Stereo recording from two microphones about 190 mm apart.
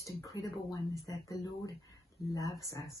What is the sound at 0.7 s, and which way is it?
A woman's voice, 20° left (ahead or behind).